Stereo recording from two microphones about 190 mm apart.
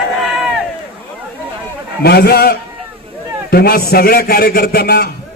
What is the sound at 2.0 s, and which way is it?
A man's voice, 55° left (ahead or behind).